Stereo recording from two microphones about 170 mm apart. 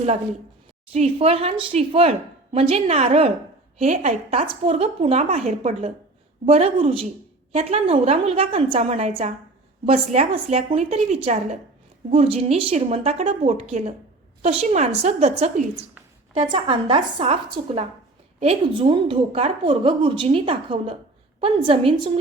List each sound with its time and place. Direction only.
0.9 s a woman's voice: 40° right (ahead or behind)
16.3 s a woman's voice: 30° right (ahead or behind)